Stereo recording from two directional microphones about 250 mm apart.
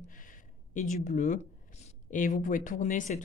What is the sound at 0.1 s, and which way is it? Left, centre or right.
Speech, left.